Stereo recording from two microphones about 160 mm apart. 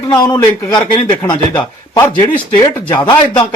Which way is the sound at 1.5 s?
15° left (ahead or behind).